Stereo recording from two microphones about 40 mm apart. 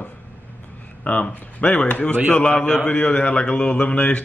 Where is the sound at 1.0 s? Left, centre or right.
Left.